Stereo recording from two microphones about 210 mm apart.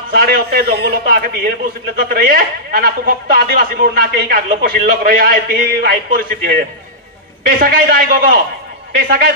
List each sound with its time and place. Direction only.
0.2 s speech: 45° right (ahead or behind)
7.4 s speech: 45° right (ahead or behind)